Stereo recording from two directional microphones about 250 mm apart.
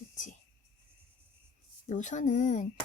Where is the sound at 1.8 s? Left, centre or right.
Left.